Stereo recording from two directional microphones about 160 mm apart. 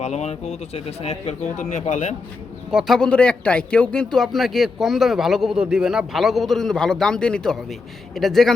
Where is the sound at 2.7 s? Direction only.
Centre (ahead or behind).